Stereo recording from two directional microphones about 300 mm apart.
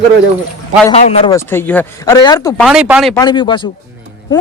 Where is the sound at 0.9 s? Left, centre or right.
Left.